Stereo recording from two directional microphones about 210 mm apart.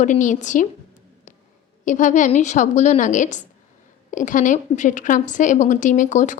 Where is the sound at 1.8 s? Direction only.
35° left (ahead or behind).